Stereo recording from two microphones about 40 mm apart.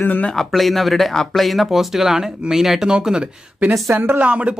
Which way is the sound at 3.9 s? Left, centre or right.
Right.